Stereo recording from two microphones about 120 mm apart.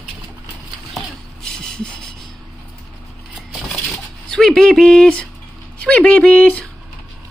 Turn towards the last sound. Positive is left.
turn(degrees=10)  # may be behind; listen again after turning